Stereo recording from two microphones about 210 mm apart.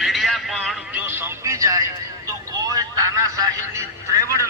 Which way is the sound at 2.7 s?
15° right (ahead or behind).